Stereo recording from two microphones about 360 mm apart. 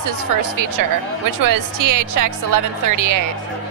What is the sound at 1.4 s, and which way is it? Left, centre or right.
Speech, right.